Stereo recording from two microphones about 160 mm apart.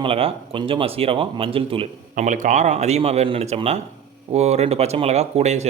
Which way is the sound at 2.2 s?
50° right (ahead or behind).